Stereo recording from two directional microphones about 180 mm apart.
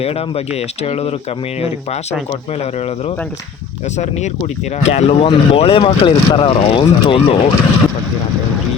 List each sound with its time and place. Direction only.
0.0 s speech: 35° left (ahead or behind)
3.9 s speech: 40° left (ahead or behind)